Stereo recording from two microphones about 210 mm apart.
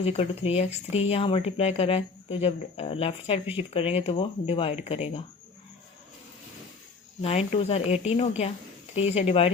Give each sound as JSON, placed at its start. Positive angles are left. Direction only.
{"t": 0.0, "sound": "speech", "side_deg": 30}
{"t": 7.2, "sound": "speech", "side_deg": 30}